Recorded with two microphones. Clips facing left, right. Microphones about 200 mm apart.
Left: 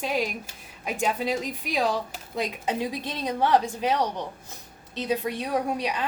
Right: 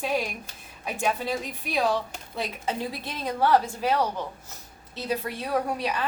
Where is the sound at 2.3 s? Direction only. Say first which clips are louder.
Left 3 dB; 15° left (ahead or behind).